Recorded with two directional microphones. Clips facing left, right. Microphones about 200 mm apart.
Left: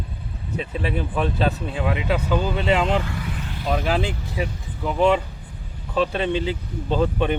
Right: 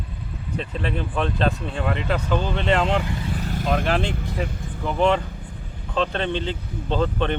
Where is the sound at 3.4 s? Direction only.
45° right (ahead or behind).